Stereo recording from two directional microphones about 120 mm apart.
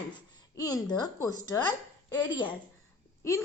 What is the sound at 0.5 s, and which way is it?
Speech, 30° left (ahead or behind).